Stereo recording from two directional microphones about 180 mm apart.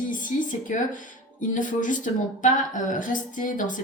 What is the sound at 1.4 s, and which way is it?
A woman's voice, 45° left (ahead or behind).